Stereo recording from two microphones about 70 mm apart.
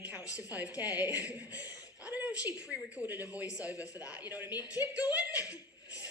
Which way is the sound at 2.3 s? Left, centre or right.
Left.